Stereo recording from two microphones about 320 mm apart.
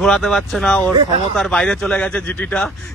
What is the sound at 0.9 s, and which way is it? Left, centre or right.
Speech, centre.